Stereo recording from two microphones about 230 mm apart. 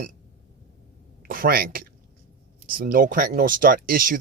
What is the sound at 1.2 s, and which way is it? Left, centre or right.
Speech, right.